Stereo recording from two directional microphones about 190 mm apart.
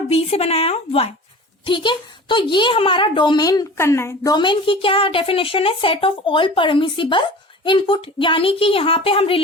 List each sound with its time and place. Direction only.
0.1 s speech: 35° left (ahead or behind)